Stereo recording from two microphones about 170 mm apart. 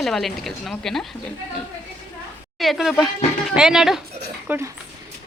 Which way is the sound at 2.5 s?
Centre (ahead or behind).